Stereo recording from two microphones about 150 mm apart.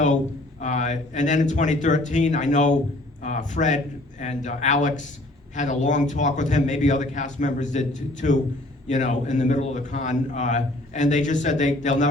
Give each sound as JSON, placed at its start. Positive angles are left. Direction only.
{"t": 0.6, "sound": "a man's voice", "side_deg": 55}